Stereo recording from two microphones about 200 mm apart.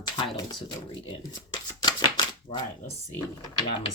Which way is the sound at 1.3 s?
20° left (ahead or behind).